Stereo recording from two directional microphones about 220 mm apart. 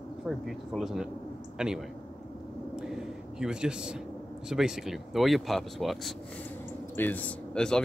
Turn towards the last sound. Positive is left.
turn(degrees=5)  # may be behind; listen again after turning